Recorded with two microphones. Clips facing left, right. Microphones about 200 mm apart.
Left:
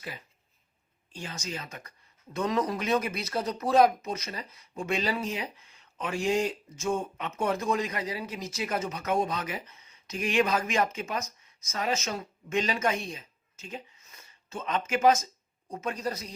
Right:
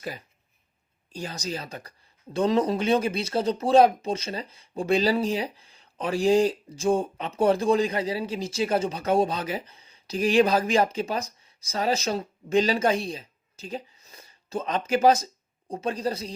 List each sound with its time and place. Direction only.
1.1 s speech: 35° right (ahead or behind)